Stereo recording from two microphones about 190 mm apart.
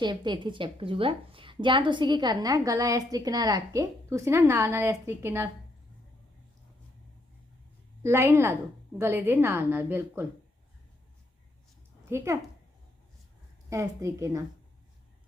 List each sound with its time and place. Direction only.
0.0 s a woman's voice: 25° right (ahead or behind)
8.0 s a woman's voice: 15° right (ahead or behind)
12.1 s a woman's voice: 15° right (ahead or behind)
13.7 s a woman's voice: 15° right (ahead or behind)